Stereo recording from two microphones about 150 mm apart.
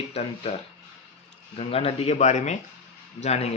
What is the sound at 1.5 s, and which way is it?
Speech, 40° left (ahead or behind).